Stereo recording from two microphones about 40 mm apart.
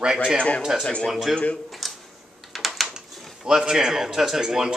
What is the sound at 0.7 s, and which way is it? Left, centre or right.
Speech, centre.